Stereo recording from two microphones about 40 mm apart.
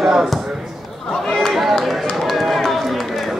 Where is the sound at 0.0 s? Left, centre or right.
Centre.